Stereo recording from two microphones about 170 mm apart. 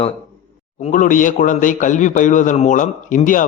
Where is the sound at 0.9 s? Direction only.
50° left (ahead or behind).